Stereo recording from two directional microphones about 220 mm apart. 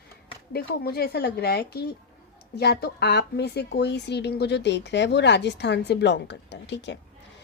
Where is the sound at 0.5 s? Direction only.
45° left (ahead or behind).